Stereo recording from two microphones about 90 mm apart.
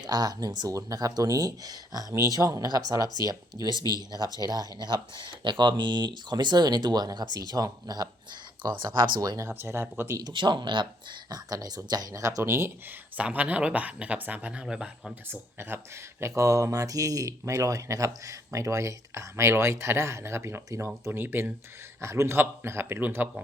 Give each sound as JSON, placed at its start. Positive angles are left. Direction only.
{"t": 0.0, "sound": "speech", "side_deg": -50}
{"t": 5.1, "sound": "speech", "side_deg": -60}
{"t": 8.6, "sound": "speech", "side_deg": -60}
{"t": 9.5, "sound": "a man's voice", "side_deg": -25}
{"t": 10.2, "sound": "speech", "side_deg": -55}
{"t": 13.1, "sound": "speech", "side_deg": -15}
{"t": 15.3, "sound": "a man's voice", "side_deg": -25}
{"t": 16.2, "sound": "a man's voice", "side_deg": -35}